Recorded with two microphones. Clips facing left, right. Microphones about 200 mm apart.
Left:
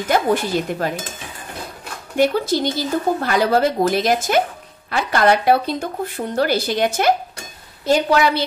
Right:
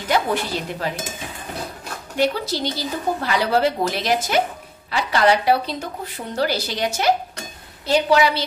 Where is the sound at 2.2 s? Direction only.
50° left (ahead or behind).